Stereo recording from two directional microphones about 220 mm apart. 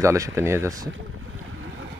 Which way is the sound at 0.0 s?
15° right (ahead or behind).